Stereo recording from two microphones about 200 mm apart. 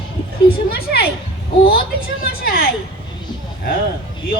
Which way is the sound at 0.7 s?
50° left (ahead or behind).